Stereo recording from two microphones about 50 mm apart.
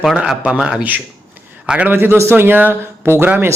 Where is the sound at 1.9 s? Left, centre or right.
Right.